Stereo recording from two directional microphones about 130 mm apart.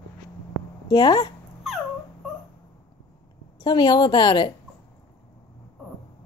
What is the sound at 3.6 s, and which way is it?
Speech, 35° left (ahead or behind).